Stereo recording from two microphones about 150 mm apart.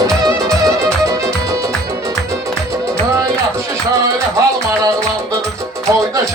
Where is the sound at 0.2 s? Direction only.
20° right (ahead or behind).